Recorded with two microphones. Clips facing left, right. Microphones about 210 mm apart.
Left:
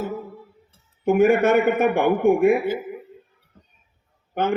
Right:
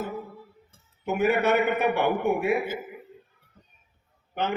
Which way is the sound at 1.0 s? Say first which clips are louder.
Left 7 dB; 50° left (ahead or behind).